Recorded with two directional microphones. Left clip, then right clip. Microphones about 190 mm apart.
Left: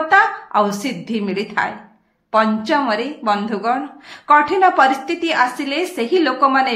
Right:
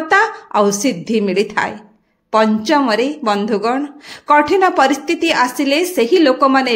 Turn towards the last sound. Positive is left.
turn(degrees=-50)  # may be behind; listen again after turning